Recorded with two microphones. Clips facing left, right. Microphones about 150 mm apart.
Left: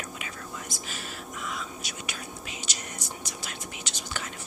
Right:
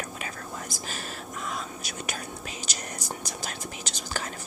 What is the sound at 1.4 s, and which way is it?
Whispering, 40° right (ahead or behind).